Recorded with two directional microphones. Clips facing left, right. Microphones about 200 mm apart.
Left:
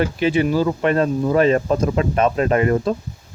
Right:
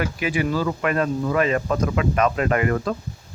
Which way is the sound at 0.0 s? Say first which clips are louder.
Left 6 dB; 30° left (ahead or behind).